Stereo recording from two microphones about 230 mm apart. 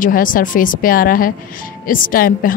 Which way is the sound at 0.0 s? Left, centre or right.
Left.